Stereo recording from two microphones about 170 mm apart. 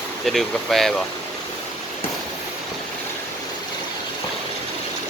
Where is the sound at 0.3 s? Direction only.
Centre (ahead or behind).